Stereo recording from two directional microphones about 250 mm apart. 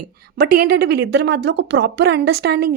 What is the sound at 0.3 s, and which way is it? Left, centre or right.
Speech, right.